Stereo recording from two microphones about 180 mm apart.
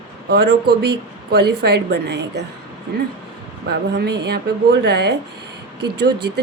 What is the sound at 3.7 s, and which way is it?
Speech, 65° right (ahead or behind).